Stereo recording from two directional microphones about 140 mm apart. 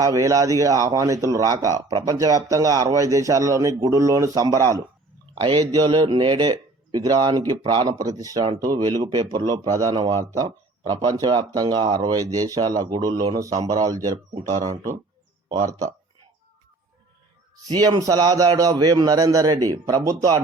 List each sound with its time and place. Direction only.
0.0 s speech: 25° right (ahead or behind)
17.7 s speech: 30° right (ahead or behind)